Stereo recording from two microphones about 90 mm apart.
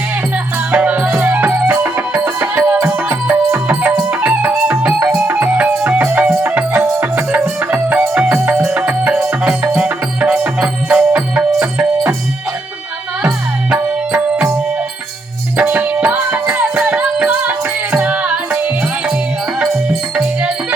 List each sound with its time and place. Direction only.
0.7 s music: 15° right (ahead or behind)
13.7 s music: 15° right (ahead or behind)
15.5 s music: 20° right (ahead or behind)
20.1 s music: 10° right (ahead or behind)